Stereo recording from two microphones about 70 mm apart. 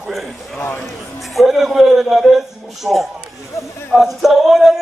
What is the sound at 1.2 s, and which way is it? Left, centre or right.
A man's voice, centre.